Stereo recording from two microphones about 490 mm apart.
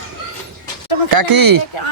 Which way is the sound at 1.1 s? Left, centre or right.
Right.